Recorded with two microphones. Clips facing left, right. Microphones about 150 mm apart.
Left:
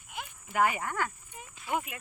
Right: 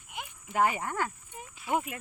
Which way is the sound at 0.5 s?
25° right (ahead or behind).